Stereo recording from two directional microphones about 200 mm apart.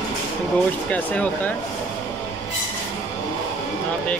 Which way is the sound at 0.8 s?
5° left (ahead or behind).